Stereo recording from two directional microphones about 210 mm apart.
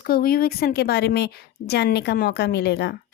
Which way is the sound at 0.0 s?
45° left (ahead or behind).